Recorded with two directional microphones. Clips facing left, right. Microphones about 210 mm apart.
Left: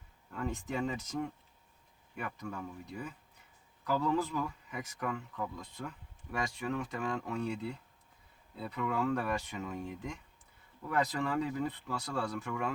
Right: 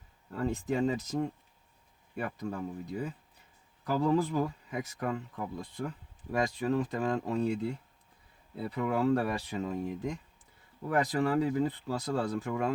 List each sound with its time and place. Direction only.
0.3 s speech: 35° right (ahead or behind)
8.7 s speech: 35° right (ahead or behind)